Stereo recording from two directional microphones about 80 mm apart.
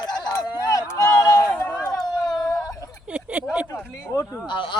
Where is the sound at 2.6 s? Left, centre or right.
Left.